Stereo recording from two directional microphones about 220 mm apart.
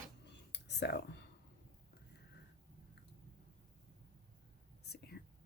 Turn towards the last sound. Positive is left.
turn(degrees=50)  # may be behind; listen again after turning